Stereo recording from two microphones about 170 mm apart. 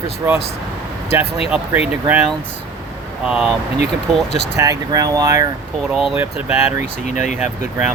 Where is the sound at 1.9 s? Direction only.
5° right (ahead or behind).